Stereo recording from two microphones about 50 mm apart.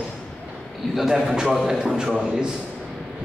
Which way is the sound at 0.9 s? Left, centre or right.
Centre.